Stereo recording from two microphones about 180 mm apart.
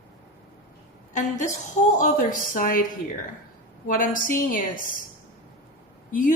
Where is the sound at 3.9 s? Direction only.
50° left (ahead or behind).